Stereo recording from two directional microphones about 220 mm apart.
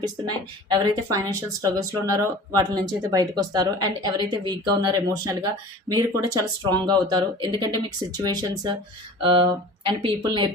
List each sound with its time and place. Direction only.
0.0 s a woman's voice: 20° right (ahead or behind)